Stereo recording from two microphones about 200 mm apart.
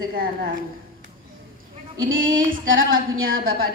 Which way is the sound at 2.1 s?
75° right (ahead or behind).